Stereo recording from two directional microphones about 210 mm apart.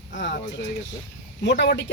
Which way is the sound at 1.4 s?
55° left (ahead or behind).